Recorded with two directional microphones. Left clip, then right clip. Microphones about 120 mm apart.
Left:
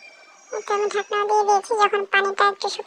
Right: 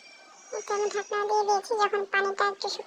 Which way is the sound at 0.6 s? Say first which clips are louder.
Left 6 dB; 25° left (ahead or behind).